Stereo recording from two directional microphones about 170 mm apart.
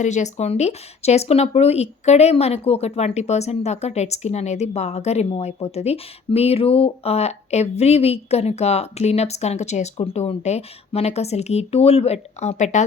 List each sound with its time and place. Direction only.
0.0 s speech: 45° left (ahead or behind)